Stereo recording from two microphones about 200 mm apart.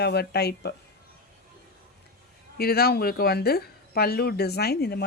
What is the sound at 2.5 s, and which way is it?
Speech, 50° left (ahead or behind).